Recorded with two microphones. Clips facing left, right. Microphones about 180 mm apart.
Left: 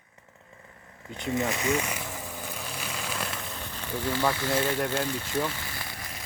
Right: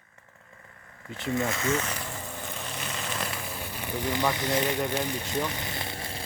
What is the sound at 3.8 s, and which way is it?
Speech, 15° right (ahead or behind).